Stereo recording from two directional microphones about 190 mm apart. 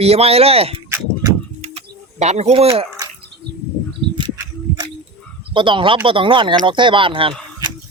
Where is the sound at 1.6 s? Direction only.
30° right (ahead or behind).